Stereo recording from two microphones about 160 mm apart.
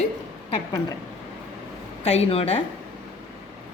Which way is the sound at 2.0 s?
40° left (ahead or behind).